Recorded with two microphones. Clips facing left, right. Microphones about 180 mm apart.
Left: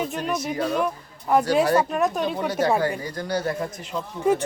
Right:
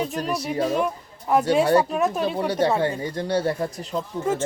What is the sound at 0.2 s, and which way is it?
Speech, 35° right (ahead or behind).